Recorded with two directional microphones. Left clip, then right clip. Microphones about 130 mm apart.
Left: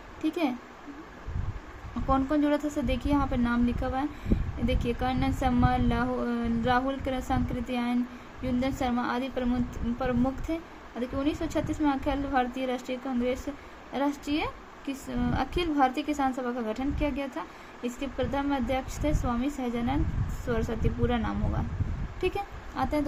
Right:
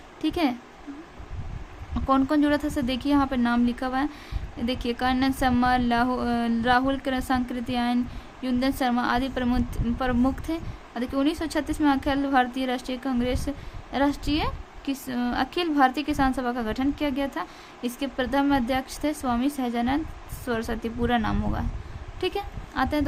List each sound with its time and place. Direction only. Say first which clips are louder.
2.0 s speech: right 4 dB; 45° right (ahead or behind)
22.7 s speech: right 4 dB; 40° right (ahead or behind)